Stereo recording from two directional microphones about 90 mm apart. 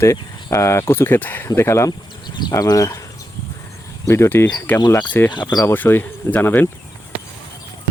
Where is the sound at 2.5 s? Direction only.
40° left (ahead or behind).